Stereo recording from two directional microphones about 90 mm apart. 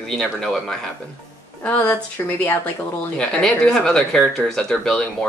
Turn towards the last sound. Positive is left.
turn(degrees=10)  # may be behind; listen again after turning